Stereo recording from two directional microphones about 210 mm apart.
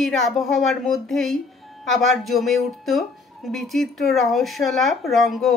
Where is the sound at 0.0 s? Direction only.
Centre (ahead or behind).